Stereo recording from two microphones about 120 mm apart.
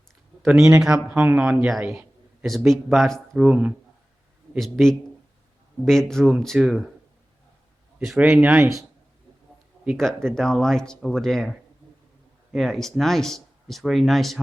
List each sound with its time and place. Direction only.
0.4 s speech: 5° right (ahead or behind)
1.4 s speech: 5° right (ahead or behind)
4.5 s speech: centre (ahead or behind)
7.9 s speech: 5° right (ahead or behind)
8.2 s speech: 15° right (ahead or behind)
9.8 s speech: centre (ahead or behind)
12.5 s speech: centre (ahead or behind)